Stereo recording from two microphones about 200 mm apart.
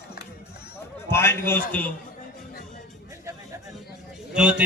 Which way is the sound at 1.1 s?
10° left (ahead or behind).